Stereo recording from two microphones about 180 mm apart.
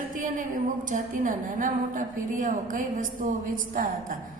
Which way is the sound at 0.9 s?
45° right (ahead or behind).